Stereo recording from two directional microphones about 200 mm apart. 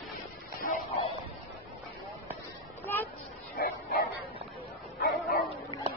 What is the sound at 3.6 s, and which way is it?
Bow-wow, 45° left (ahead or behind).